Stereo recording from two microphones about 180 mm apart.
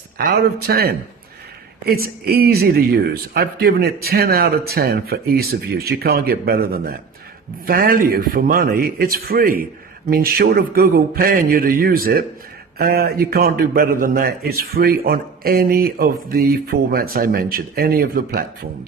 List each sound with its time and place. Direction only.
0.2 s a man's voice: 60° right (ahead or behind)